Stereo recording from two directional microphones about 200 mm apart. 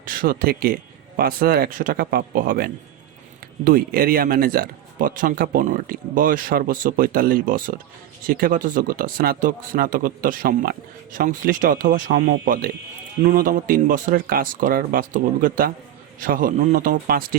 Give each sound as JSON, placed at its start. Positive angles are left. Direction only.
{"t": 0.0, "sound": "a man's voice", "side_deg": -45}